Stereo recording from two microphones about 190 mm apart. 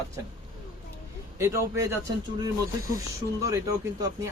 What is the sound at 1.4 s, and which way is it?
Speech, 15° right (ahead or behind).